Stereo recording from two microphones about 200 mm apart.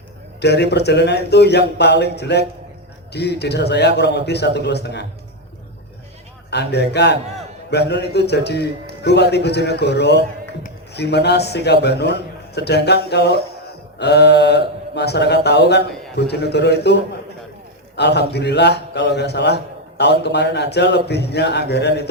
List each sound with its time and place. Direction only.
0.4 s a man's voice: 55° left (ahead or behind)
6.5 s a man's voice: 55° left (ahead or behind)